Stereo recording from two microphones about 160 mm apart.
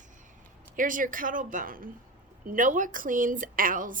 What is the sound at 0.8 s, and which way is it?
A woman's voice, 55° right (ahead or behind).